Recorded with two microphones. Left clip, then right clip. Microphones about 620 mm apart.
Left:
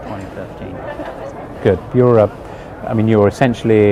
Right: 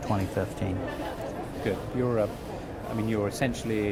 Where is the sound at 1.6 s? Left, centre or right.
Left.